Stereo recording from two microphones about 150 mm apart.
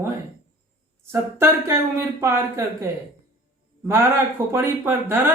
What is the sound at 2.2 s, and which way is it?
A man's voice, 15° right (ahead or behind).